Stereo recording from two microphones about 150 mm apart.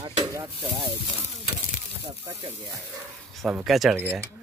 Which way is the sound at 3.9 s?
15° right (ahead or behind).